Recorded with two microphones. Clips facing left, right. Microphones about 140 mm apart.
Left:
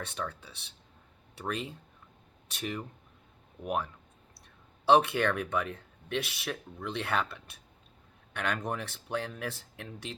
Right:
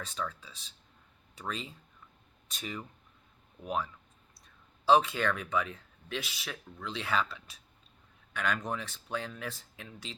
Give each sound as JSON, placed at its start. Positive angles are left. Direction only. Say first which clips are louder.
{"t": 0.0, "sound": "speech", "louder": "left 1 dB", "side_deg": 65}
{"t": 4.4, "sound": "speech", "louder": "left 1 dB", "side_deg": 65}